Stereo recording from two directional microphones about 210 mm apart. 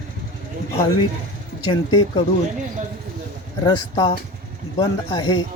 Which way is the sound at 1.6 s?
20° left (ahead or behind).